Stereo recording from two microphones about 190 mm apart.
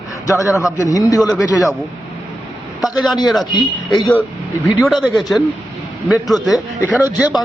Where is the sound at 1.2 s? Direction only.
Centre (ahead or behind).